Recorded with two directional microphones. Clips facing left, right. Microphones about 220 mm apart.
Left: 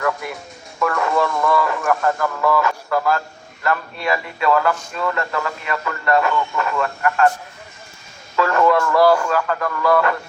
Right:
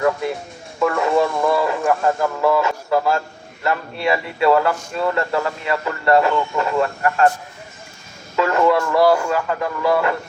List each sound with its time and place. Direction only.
0.0 s speech: 25° right (ahead or behind)
8.4 s speech: 20° right (ahead or behind)